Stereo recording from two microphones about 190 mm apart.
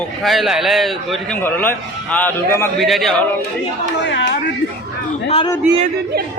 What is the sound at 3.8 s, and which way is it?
Speech, 70° left (ahead or behind).